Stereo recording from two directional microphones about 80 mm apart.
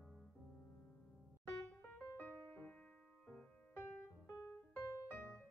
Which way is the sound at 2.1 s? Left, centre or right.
Left.